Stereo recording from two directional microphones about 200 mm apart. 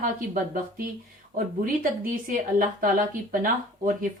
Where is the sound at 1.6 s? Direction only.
45° right (ahead or behind).